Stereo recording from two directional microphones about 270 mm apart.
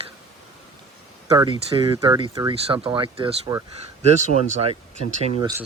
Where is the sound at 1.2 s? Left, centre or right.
Centre.